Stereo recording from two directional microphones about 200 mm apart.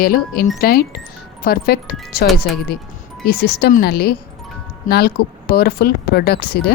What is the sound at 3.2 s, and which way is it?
Speech, 50° left (ahead or behind).